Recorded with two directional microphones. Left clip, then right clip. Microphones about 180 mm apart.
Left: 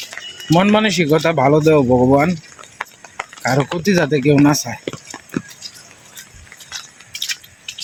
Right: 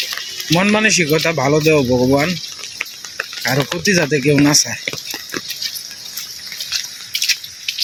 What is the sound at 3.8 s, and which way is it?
Speech, 10° left (ahead or behind).